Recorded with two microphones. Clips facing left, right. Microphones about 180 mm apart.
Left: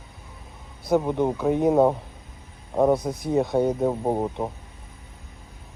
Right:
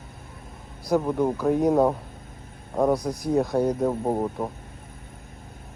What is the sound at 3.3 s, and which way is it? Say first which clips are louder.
Speech: left 1 dB; centre (ahead or behind).